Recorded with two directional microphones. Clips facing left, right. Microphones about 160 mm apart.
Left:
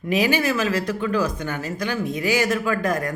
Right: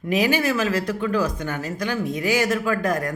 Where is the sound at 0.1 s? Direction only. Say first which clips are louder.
Even; 45° right (ahead or behind).